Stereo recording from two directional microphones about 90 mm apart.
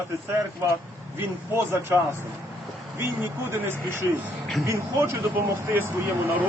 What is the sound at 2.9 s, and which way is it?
Speech, 30° right (ahead or behind).